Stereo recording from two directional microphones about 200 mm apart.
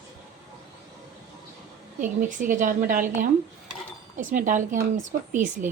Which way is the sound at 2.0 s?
40° right (ahead or behind).